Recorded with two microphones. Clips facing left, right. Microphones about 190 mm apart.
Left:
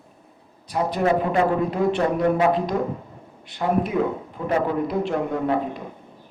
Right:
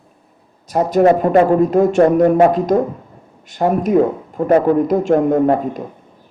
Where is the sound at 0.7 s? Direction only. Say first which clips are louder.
Right 9 dB; 45° right (ahead or behind).